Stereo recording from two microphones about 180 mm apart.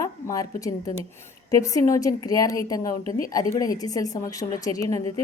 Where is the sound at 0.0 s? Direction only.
20° left (ahead or behind).